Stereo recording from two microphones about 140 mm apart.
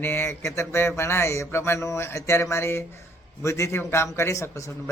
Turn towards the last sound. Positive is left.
turn(degrees=20)  # may be behind; listen again after turning